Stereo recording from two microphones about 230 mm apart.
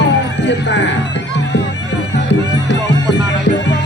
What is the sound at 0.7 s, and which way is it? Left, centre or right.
Speech, left.